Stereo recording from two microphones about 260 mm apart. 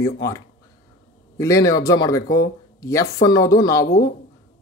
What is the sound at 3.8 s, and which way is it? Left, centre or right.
Speech, left.